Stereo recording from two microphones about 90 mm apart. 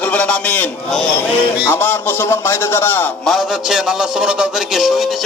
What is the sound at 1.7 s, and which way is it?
Speech, 20° left (ahead or behind).